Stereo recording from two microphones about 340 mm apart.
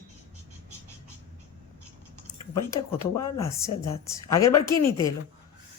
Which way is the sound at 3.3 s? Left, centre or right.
Left.